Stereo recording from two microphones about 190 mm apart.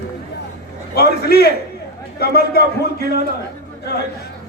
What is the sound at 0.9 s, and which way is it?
A man's voice, 60° left (ahead or behind).